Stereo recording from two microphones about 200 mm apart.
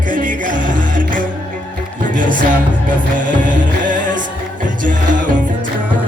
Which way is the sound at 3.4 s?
40° right (ahead or behind).